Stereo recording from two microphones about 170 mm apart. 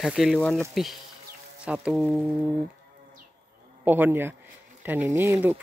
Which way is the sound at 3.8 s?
10° right (ahead or behind).